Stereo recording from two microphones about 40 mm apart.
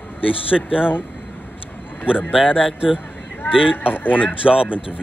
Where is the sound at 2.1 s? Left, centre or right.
Right.